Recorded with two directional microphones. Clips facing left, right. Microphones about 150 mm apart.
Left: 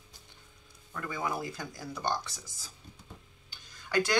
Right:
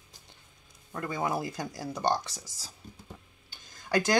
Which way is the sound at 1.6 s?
40° right (ahead or behind).